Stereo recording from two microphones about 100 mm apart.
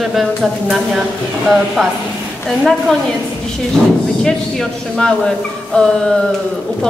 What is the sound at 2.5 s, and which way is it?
Speech, 5° left (ahead or behind).